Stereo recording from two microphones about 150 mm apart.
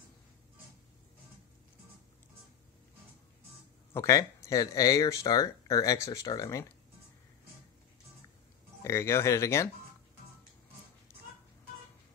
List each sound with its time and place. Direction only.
3.9 s speech: 20° left (ahead or behind)
8.8 s speech: 20° left (ahead or behind)